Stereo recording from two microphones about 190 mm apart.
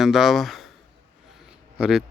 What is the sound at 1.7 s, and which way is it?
Speech, 5° right (ahead or behind).